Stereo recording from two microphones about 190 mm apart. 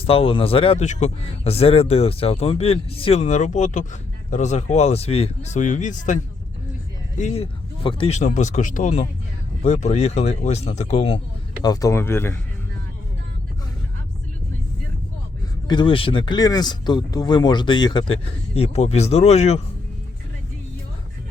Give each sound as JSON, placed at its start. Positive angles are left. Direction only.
{"t": 0.0, "sound": "speech", "side_deg": 30}
{"t": 7.2, "sound": "speech", "side_deg": 35}
{"t": 11.6, "sound": "speech", "side_deg": 20}
{"t": 15.6, "sound": "speech", "side_deg": 25}